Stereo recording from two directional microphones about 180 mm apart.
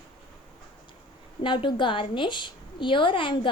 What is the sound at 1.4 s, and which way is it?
A woman's voice, 25° left (ahead or behind).